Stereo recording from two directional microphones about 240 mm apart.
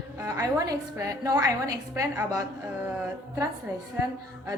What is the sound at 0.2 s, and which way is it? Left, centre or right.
A woman's voice, centre.